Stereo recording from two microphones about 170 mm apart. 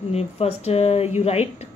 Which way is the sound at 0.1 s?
35° left (ahead or behind).